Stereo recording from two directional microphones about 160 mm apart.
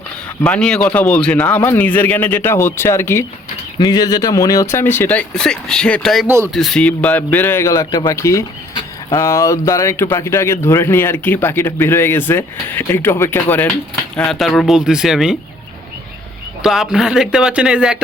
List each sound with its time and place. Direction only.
0.4 s speech: 5° left (ahead or behind)
6.2 s speech: 15° right (ahead or behind)
6.5 s speech: centre (ahead or behind)
14.3 s speech: centre (ahead or behind)
16.6 s speech: centre (ahead or behind)